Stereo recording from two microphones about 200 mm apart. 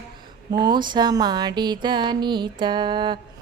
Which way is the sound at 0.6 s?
20° right (ahead or behind).